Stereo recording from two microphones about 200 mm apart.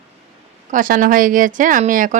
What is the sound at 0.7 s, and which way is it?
Speech, 40° right (ahead or behind).